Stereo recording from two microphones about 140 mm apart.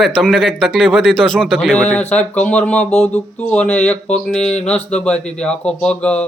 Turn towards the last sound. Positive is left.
turn(degrees=5)  # may be behind; listen again after turning